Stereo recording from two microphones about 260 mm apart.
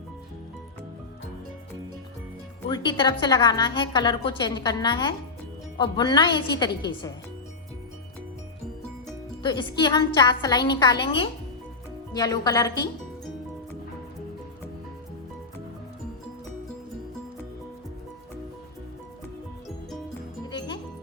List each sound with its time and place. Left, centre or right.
2.6 s a woman's voice: centre
9.4 s a woman's voice: centre